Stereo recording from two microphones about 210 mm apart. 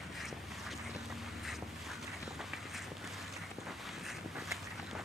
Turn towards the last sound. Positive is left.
turn(degrees=0)  # may be behind; listen again after turning